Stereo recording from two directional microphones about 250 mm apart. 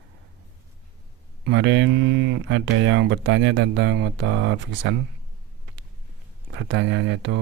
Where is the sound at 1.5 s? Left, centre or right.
Right.